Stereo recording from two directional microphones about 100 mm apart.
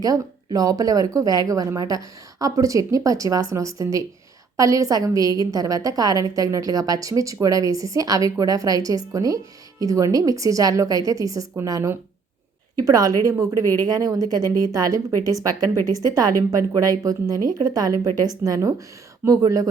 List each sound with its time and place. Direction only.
0.0 s a woman's voice: 35° right (ahead or behind)
16.0 s a woman's voice: 40° right (ahead or behind)